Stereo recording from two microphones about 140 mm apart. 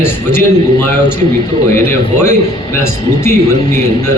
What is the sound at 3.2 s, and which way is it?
Speech, 15° left (ahead or behind).